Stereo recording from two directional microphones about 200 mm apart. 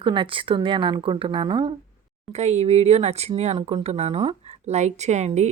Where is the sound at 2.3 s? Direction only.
35° right (ahead or behind).